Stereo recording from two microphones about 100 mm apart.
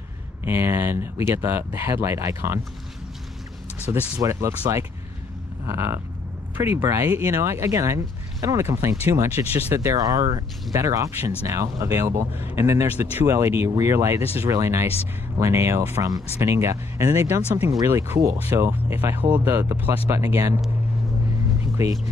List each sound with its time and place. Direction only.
0.5 s speech: 20° right (ahead or behind)
3.9 s speech: 35° right (ahead or behind); by 9.8 s 20° right (ahead or behind)
9.8 s speech: 35° right (ahead or behind)
21.7 s speech: 30° right (ahead or behind)